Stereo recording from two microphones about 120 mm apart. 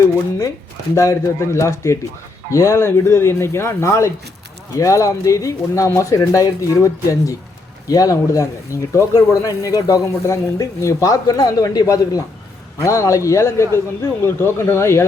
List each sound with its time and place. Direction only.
0.9 s speech: 25° left (ahead or behind)